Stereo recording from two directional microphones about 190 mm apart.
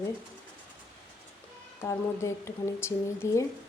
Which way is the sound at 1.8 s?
15° left (ahead or behind).